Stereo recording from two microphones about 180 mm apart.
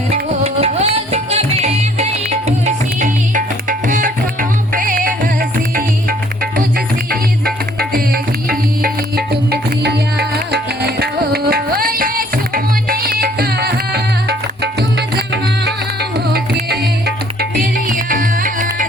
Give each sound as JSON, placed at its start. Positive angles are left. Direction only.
{"t": 0.1, "sound": "music", "side_deg": -35}
{"t": 17.6, "sound": "music", "side_deg": -50}